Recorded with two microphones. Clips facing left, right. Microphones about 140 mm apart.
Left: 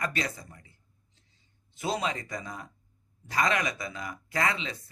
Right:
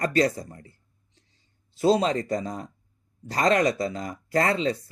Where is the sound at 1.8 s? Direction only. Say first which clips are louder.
Right 10 dB; 30° right (ahead or behind).